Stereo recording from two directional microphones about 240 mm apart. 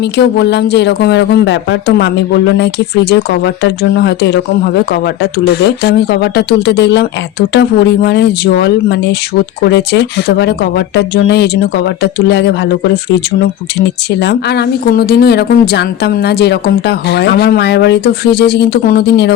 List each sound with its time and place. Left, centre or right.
0.2 s a woman's voice: left
14.2 s a woman's voice: left